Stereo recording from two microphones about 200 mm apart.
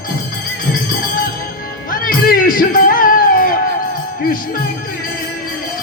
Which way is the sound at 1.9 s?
45° left (ahead or behind).